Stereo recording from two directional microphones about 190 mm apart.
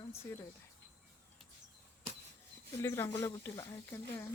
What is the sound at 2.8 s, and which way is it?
Speech, 15° left (ahead or behind).